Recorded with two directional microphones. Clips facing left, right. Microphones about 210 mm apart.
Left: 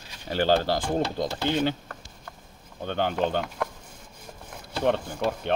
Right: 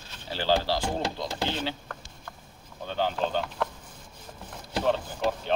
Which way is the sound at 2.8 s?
60° left (ahead or behind).